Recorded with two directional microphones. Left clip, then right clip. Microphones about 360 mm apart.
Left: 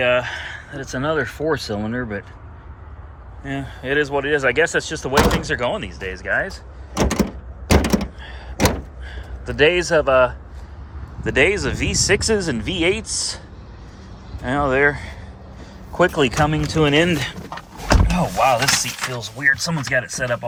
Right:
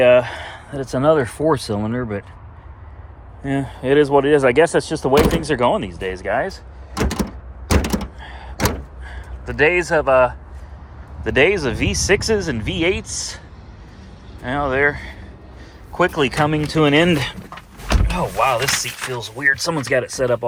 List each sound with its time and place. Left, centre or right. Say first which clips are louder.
0.0 s speech: right 6 dB; centre
3.4 s speech: right 5 dB; centre
7.7 s door: left 3 dB; left
8.2 s door: right 1 dB; centre
9.0 s speech: right 1 dB; centre
14.4 s speech: left 1 dB; centre
19.9 s speech: right 2 dB; centre